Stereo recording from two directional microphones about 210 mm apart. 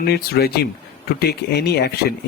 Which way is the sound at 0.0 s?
50° left (ahead or behind).